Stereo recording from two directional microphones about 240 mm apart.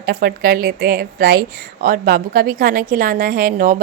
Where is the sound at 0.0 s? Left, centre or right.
Right.